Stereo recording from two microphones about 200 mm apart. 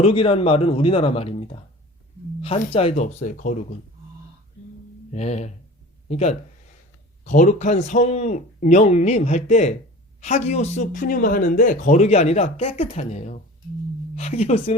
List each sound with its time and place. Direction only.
0.0 s speech: 30° left (ahead or behind)
2.6 s speech: 30° left (ahead or behind)
5.1 s speech: 35° left (ahead or behind)